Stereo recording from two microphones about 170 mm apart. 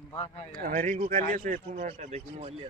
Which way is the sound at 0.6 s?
50° right (ahead or behind).